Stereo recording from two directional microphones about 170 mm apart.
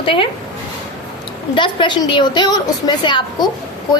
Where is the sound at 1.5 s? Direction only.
30° left (ahead or behind).